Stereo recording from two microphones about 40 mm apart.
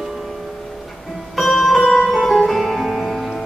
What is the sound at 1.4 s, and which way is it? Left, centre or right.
Music, centre.